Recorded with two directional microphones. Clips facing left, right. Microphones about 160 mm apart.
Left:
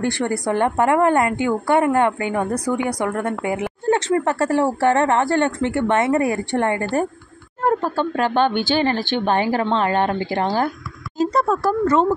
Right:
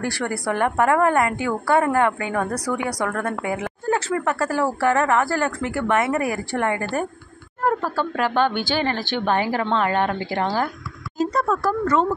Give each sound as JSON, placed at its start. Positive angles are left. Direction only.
{"t": 0.0, "sound": "speech", "side_deg": 25}
{"t": 2.5, "sound": "a woman's voice", "side_deg": 10}
{"t": 3.1, "sound": "speech", "side_deg": 30}